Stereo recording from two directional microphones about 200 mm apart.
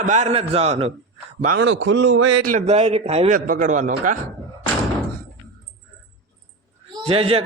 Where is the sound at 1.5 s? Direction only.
75° right (ahead or behind).